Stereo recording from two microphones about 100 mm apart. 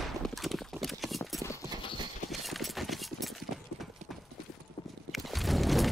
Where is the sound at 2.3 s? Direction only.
Centre (ahead or behind).